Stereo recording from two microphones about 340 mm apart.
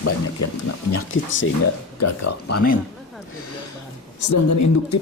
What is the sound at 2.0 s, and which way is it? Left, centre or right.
Speech, left.